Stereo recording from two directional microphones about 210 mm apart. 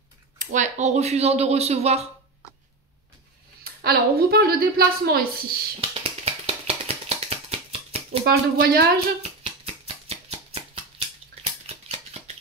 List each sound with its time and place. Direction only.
0.4 s speech: 35° right (ahead or behind)
3.6 s a woman's voice: 45° right (ahead or behind)
5.8 s a sound: 25° right (ahead or behind)
8.2 s a woman's voice: 45° right (ahead or behind)
10.0 s a sound: 30° right (ahead or behind)
11.6 s scissors: 30° right (ahead or behind)